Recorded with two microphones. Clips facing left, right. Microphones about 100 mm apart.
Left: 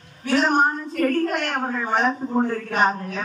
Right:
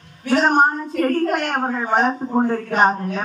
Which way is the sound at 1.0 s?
40° right (ahead or behind).